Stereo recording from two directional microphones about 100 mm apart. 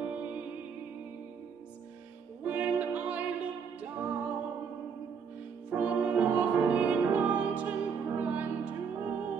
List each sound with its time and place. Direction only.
0.0 s music: 15° right (ahead or behind)
2.4 s music: 15° right (ahead or behind)
5.7 s music: 15° right (ahead or behind)